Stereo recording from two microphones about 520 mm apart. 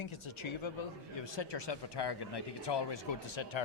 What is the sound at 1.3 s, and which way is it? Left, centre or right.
Speech, left.